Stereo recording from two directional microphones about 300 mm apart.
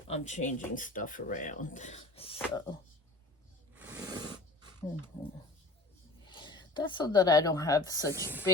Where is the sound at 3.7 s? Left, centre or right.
Centre.